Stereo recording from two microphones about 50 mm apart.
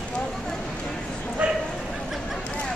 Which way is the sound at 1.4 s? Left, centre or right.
Right.